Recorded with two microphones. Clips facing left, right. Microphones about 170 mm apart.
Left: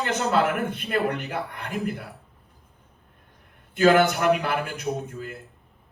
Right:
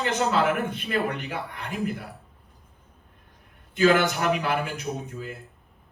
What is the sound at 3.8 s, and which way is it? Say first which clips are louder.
A man's voice: left 2 dB; 60° left (ahead or behind).